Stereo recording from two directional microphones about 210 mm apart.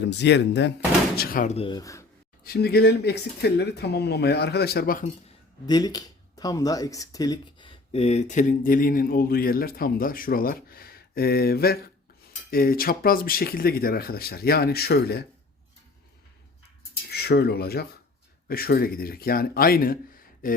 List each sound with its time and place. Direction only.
0.1 s speech: 55° left (ahead or behind)
1.1 s speech: 45° left (ahead or behind)
1.5 s speech: 20° left (ahead or behind)
2.4 s speech: 50° left (ahead or behind)
5.6 s speech: 20° left (ahead or behind); by 15.2 s 50° left (ahead or behind)
17.1 s speech: 50° left (ahead or behind)